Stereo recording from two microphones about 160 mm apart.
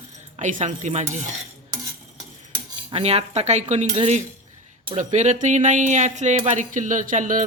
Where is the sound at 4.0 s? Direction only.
45° right (ahead or behind).